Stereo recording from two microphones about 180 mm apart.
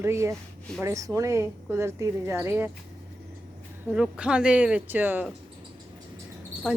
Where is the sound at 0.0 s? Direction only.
15° right (ahead or behind).